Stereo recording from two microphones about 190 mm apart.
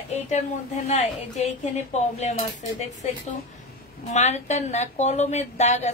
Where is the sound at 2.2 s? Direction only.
35° left (ahead or behind).